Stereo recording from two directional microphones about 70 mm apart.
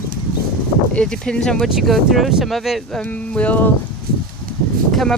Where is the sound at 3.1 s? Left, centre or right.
Left.